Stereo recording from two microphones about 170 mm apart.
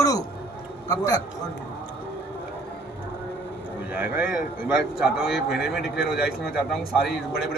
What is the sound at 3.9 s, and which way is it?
A man's voice, 10° right (ahead or behind).